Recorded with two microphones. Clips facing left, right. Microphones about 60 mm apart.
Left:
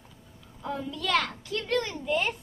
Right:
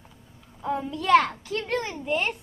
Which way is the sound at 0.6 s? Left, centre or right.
Right.